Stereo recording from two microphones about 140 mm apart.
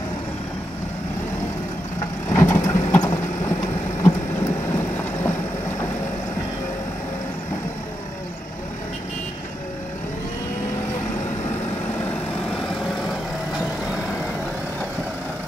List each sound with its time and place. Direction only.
2.3 s vehicle: 20° left (ahead or behind)
4.7 s vehicle: 15° left (ahead or behind)
12.4 s vehicle: 5° left (ahead or behind)